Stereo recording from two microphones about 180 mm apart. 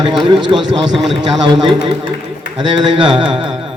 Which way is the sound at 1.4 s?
25° right (ahead or behind).